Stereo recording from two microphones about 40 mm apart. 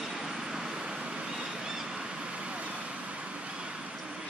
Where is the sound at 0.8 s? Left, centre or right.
Right.